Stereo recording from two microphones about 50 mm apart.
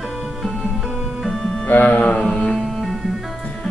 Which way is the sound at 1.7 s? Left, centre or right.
Left.